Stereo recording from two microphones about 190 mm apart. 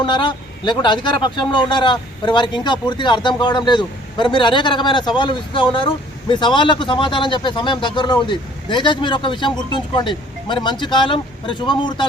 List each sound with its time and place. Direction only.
0.0 s speech: 25° left (ahead or behind)